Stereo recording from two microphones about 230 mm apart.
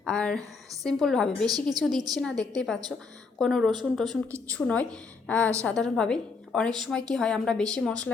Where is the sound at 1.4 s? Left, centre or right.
Centre.